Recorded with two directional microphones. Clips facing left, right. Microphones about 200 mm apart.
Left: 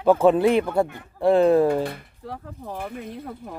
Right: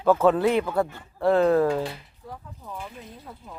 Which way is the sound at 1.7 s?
55° left (ahead or behind).